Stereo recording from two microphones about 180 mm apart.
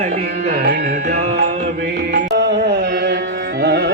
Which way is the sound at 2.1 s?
70° right (ahead or behind).